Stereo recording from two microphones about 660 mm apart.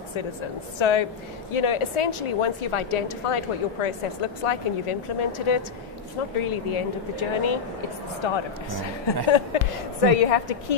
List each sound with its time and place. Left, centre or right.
0.7 s a woman's voice: left